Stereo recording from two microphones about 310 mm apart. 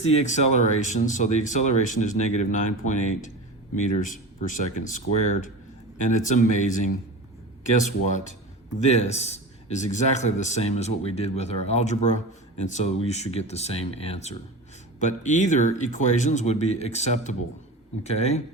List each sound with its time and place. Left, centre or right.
0.0 s speech: left